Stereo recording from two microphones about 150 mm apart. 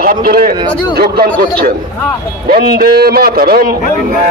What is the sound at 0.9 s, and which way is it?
A man's voice, 90° right.